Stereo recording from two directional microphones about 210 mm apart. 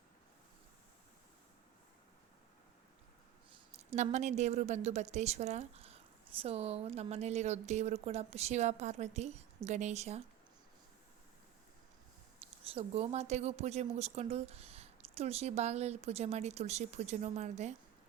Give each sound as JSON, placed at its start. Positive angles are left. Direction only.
{"t": 3.7, "sound": "a woman's voice", "side_deg": -30}
{"t": 12.6, "sound": "a woman's voice", "side_deg": -30}